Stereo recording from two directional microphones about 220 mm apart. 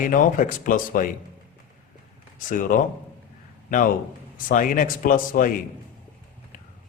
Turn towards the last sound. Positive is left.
turn(degrees=40)  # may be behind; listen again after turning